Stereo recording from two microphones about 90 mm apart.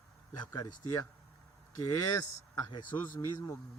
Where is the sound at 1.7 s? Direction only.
45° left (ahead or behind).